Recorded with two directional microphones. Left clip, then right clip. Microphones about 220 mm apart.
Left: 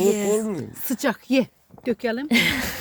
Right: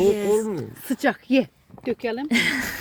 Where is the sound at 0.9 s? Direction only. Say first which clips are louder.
Right 1 dB; 20° left (ahead or behind).